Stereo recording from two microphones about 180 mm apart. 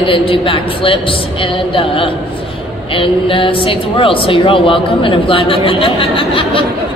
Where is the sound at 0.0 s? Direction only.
30° left (ahead or behind).